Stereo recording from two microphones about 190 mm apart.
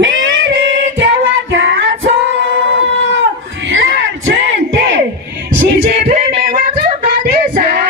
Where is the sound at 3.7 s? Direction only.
85° right.